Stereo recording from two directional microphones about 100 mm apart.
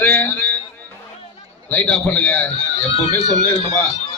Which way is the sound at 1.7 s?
15° left (ahead or behind).